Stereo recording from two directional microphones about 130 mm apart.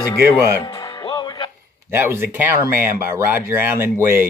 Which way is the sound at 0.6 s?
35° left (ahead or behind).